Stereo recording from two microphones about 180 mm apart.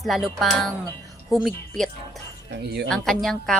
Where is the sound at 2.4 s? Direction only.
70° right (ahead or behind).